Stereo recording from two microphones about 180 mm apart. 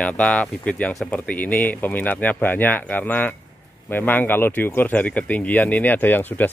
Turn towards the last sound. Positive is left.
turn(degrees=10)  # may be behind; listen again after turning